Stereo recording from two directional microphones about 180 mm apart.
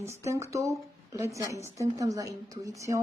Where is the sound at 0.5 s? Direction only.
15° right (ahead or behind).